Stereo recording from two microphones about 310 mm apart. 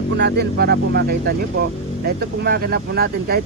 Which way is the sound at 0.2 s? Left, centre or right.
Right.